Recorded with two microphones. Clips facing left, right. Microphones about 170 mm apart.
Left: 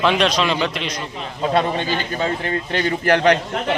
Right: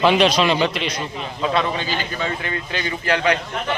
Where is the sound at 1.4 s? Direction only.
40° left (ahead or behind).